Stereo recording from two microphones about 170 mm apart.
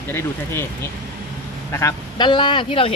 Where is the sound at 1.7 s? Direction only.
15° left (ahead or behind).